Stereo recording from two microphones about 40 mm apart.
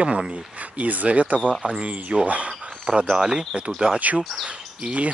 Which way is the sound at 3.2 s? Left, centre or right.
Right.